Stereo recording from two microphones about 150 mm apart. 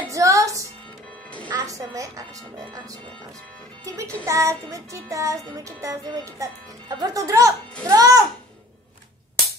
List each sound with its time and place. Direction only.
0.1 s music: 20° right (ahead or behind)
1.5 s a woman's voice: 25° right (ahead or behind)
3.8 s music: 20° right (ahead or behind)